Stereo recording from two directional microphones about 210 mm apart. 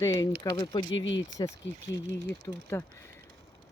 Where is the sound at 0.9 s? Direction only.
65° left (ahead or behind).